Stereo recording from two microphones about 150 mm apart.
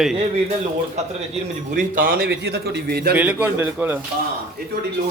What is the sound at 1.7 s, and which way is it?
A man's voice, 65° right (ahead or behind).